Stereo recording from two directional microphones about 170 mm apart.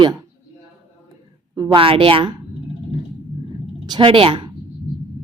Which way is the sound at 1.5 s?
25° right (ahead or behind).